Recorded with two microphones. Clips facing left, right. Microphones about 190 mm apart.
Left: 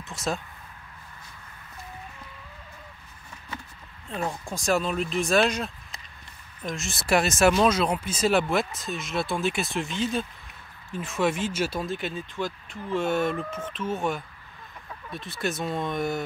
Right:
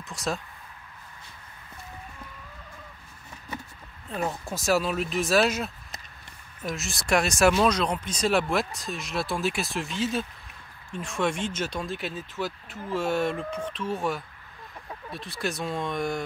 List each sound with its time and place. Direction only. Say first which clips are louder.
0.0 s speech: left 1 dB; centre (ahead or behind)
4.1 s speech: right 1 dB; 5° right (ahead or behind)